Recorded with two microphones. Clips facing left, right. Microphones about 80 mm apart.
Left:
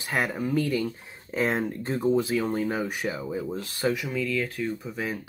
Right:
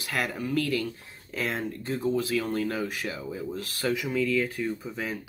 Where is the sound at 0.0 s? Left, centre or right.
Left.